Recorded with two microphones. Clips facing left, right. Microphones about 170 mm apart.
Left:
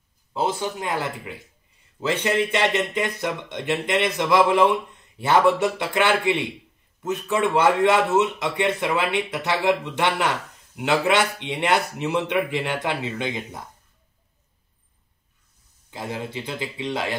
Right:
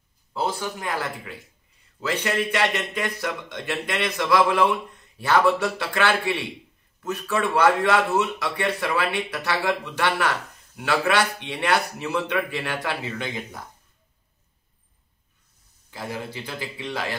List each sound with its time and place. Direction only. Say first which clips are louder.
0.3 s a man's voice: left 2 dB; 20° left (ahead or behind)
15.9 s a man's voice: left 2 dB; 20° left (ahead or behind)